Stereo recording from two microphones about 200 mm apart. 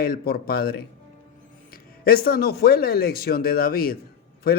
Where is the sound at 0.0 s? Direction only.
50° left (ahead or behind).